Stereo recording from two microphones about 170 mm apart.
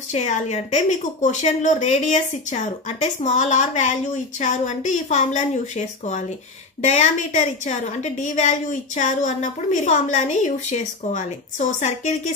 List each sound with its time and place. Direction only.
0.1 s a woman's voice: 40° left (ahead or behind)